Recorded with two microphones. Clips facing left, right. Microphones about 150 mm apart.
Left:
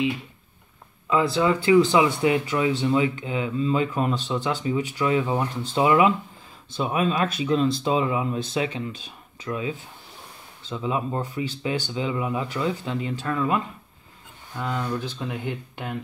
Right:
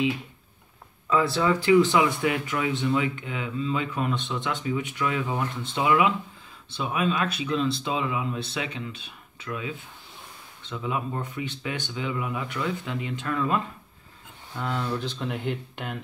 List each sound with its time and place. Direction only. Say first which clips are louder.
1.4 s speech: left 2 dB; 25° left (ahead or behind)
14.5 s speech: left 1 dB; 10° left (ahead or behind)